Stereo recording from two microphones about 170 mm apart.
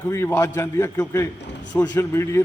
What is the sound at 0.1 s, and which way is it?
A man's voice, 15° left (ahead or behind).